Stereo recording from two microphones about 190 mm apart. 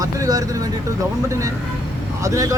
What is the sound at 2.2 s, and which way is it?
Speech, 15° right (ahead or behind).